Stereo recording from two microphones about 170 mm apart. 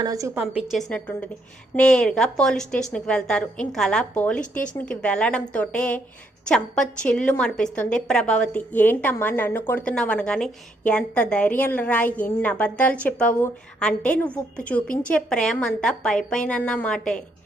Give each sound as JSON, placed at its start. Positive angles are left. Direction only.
{"t": 0.0, "sound": "a woman's voice", "side_deg": -20}
{"t": 0.3, "sound": "a woman's voice", "side_deg": -5}